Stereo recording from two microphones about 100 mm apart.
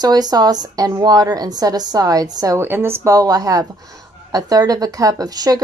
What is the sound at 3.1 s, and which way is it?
A woman's voice, 40° right (ahead or behind).